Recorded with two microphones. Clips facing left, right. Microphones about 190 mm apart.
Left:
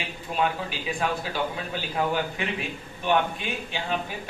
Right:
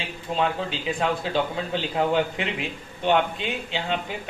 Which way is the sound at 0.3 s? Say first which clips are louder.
Right 1 dB; 25° right (ahead or behind).